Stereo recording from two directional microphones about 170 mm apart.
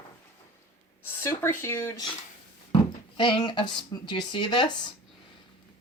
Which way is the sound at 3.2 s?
25° left (ahead or behind).